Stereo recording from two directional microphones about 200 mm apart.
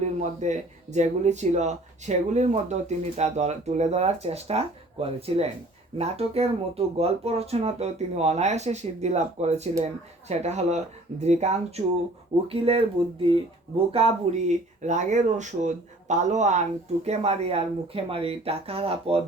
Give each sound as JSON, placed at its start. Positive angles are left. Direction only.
{"t": 0.0, "sound": "speech", "side_deg": -35}